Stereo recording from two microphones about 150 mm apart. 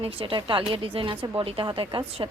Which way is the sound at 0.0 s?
35° right (ahead or behind).